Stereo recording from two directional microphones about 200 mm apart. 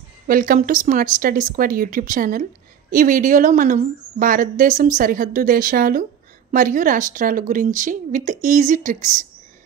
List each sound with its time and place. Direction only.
0.3 s a woman's voice: 45° right (ahead or behind)